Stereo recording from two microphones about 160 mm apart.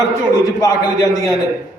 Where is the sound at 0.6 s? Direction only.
25° left (ahead or behind).